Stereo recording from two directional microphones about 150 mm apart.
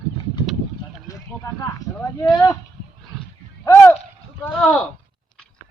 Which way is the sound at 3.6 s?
15° left (ahead or behind).